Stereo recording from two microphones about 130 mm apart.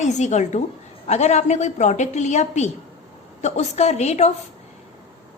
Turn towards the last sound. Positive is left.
turn(degrees=60)  # may be behind; listen again after turning